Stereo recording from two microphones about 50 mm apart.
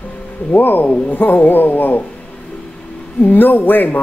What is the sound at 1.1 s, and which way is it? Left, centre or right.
Speech, left.